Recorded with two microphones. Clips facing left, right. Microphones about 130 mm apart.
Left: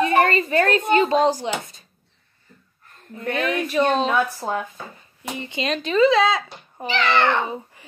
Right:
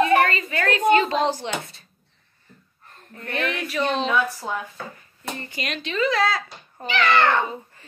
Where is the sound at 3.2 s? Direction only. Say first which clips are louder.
Left 4 dB; 20° left (ahead or behind).